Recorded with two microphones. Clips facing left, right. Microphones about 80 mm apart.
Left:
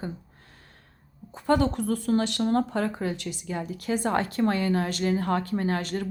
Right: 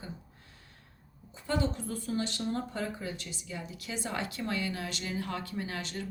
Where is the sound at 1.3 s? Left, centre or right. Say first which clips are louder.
Left 9 dB; left.